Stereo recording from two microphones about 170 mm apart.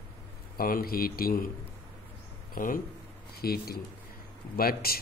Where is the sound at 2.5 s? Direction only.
55° left (ahead or behind).